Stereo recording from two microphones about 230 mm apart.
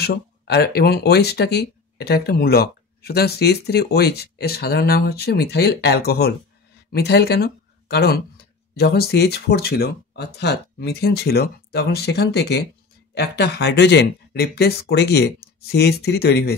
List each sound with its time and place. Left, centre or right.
0.0 s speech: left